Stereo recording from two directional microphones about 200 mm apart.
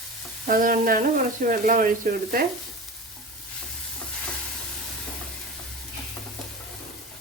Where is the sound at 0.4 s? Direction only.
45° right (ahead or behind).